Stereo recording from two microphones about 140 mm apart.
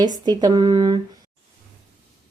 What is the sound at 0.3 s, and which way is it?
Speech, 30° right (ahead or behind).